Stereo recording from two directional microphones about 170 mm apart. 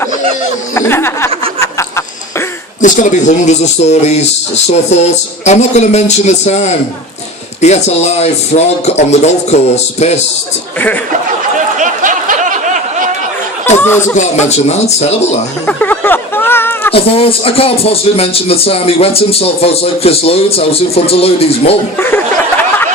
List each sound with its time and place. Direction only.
0.7 s snicker: 15° left (ahead or behind)
2.8 s speech: 45° left (ahead or behind)
11.8 s a sound: 50° right (ahead or behind)
13.7 s speech: 15° left (ahead or behind)
14.2 s speech: 40° left (ahead or behind)
15.6 s a sound: 10° left (ahead or behind)
16.9 s speech: 35° left (ahead or behind)
21.9 s speech: 10° left (ahead or behind)